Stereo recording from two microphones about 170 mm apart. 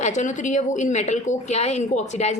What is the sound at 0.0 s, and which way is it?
A woman's voice, 45° left (ahead or behind).